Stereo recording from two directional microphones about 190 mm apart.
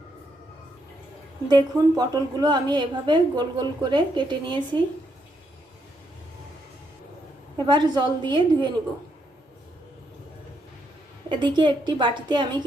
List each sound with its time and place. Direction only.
1.5 s a woman's voice: 20° right (ahead or behind)
7.5 s a woman's voice: 25° right (ahead or behind)
11.3 s a woman's voice: 25° right (ahead or behind)